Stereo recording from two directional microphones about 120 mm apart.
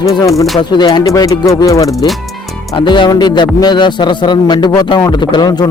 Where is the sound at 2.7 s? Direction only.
40° left (ahead or behind).